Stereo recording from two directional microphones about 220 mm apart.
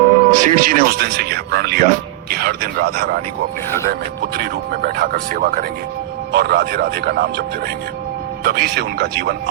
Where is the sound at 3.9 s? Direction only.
45° right (ahead or behind).